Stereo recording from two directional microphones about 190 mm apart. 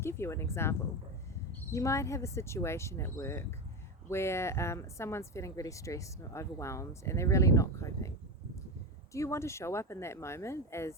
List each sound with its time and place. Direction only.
0.0 s speech: 15° left (ahead or behind)
9.1 s speech: 15° left (ahead or behind)